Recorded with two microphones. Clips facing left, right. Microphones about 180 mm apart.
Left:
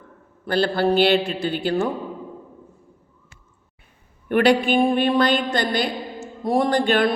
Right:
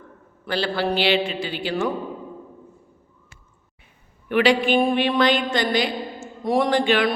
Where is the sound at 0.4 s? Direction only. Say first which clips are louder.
Left 4 dB; 50° left (ahead or behind).